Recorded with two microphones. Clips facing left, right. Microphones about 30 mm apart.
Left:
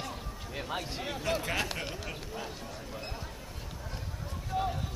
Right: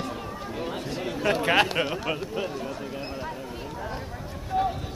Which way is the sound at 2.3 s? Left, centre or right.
Right.